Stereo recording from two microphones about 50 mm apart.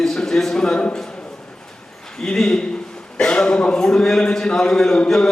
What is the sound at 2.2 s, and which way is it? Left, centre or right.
A man's voice, centre.